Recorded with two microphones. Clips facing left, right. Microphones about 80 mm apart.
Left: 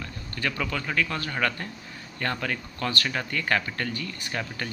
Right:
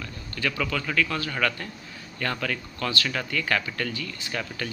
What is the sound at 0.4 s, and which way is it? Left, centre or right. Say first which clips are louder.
Speech: right 1 dB; left.